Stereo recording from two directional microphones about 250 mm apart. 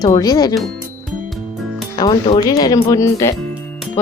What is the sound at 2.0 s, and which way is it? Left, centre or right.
Speech, centre.